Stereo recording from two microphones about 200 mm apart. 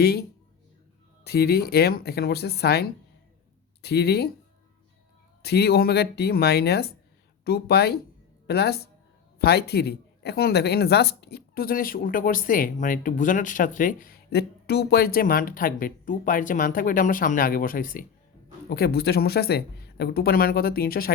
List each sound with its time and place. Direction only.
0.0 s speech: 50° left (ahead or behind)
5.4 s speech: 55° left (ahead or behind)